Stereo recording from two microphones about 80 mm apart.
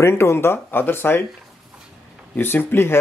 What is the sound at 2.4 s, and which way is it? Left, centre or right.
Speech, left.